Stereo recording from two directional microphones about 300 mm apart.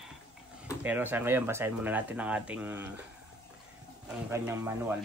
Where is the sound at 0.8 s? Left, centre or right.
Centre.